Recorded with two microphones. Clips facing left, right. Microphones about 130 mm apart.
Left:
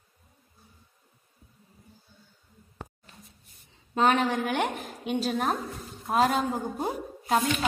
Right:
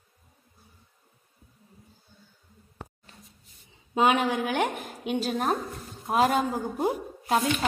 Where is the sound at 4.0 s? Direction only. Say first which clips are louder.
Right 1 dB; 10° right (ahead or behind).